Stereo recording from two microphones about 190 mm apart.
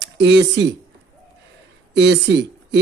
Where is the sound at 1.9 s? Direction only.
65° right (ahead or behind).